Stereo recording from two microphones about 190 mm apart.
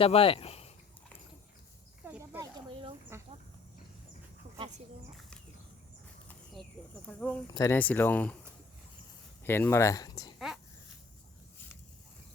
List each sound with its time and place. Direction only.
0.0 s speech: 30° left (ahead or behind)
2.0 s snake: 10° right (ahead or behind)
3.1 s a sound: 15° right (ahead or behind)
6.2 s a sound: centre (ahead or behind)
7.1 s speech: 10° left (ahead or behind)
7.4 s speech: 20° left (ahead or behind)
9.4 s speech: 10° left (ahead or behind)